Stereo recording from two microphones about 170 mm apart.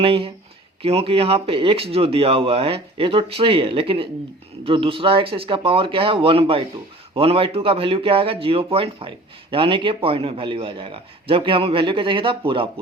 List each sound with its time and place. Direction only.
0.0 s speech: 35° right (ahead or behind)